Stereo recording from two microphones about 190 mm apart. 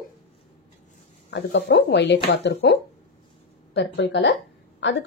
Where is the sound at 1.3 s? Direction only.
65° left (ahead or behind).